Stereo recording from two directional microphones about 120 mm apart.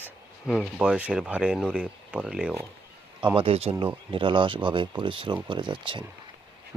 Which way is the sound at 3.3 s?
55° right (ahead or behind).